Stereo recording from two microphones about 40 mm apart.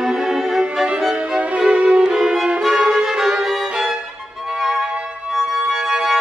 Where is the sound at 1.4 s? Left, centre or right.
Right.